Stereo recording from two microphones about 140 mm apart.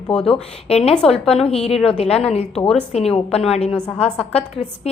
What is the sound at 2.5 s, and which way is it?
Speech, 5° left (ahead or behind).